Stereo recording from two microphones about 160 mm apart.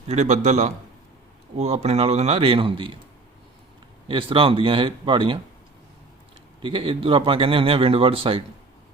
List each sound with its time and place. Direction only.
0.1 s a man's voice: 45° right (ahead or behind)
4.1 s speech: 30° right (ahead or behind)
6.6 s speech: 35° right (ahead or behind)